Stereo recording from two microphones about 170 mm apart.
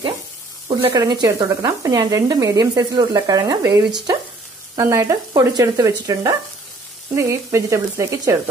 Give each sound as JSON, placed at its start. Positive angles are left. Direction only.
{"t": 0.9, "sound": "speech", "side_deg": -20}
{"t": 7.2, "sound": "sizzle", "side_deg": -15}